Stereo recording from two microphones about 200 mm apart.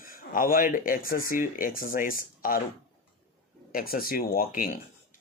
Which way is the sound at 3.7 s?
45° left (ahead or behind).